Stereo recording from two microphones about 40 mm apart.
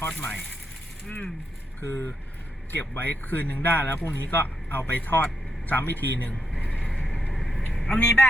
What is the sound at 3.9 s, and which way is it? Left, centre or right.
Speech, left.